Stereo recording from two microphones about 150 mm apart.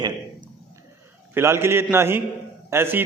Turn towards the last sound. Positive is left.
turn(degrees=-15)  # may be behind; listen again after turning